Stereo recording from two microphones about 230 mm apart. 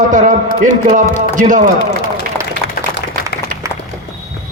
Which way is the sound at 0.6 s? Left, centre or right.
Right.